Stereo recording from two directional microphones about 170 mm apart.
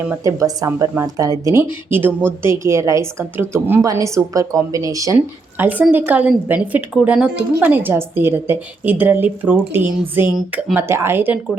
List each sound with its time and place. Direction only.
0.1 s a woman's voice: 20° right (ahead or behind); by 10.8 s centre (ahead or behind)
10.8 s a woman's voice: 15° right (ahead or behind)